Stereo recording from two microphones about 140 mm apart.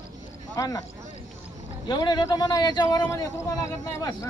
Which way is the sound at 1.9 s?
30° left (ahead or behind).